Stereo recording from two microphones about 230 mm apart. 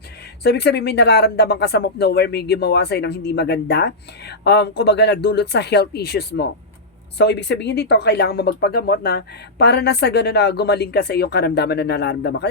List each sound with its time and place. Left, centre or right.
0.4 s speech: left